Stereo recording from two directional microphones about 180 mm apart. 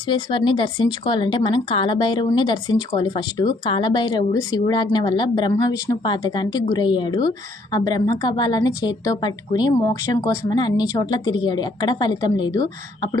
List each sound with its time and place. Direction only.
0.1 s speech: 25° left (ahead or behind)